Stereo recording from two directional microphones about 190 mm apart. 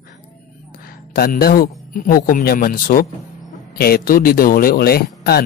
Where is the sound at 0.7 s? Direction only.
50° left (ahead or behind).